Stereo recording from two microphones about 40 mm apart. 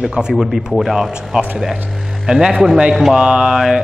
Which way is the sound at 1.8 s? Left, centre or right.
Centre.